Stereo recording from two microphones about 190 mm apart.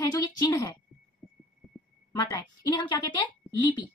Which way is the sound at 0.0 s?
20° left (ahead or behind).